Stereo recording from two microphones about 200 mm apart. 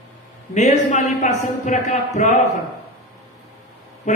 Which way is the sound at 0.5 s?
35° left (ahead or behind).